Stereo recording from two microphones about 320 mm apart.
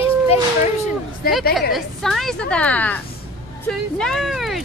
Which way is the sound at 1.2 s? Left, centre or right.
Left.